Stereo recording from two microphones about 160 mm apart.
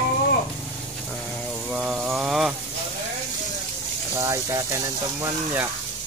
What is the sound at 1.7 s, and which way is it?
Mantra, 5° right (ahead or behind).